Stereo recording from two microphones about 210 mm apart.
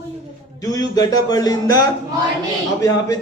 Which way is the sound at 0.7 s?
20° left (ahead or behind).